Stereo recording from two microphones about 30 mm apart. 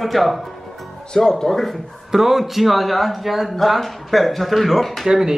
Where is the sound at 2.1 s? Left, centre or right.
Centre.